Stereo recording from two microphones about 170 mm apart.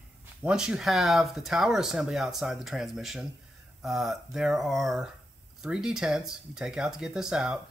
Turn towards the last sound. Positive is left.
turn(degrees=-5)  # may be behind; listen again after turning